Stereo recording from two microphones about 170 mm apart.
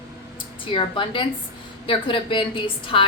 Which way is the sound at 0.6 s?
30° left (ahead or behind).